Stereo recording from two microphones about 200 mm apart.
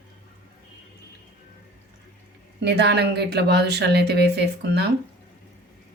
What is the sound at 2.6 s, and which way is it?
A woman's voice, 55° right (ahead or behind).